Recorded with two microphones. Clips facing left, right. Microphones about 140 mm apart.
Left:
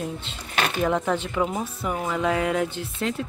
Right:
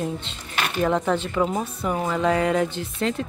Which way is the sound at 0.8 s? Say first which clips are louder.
Right 3 dB; 5° left (ahead or behind).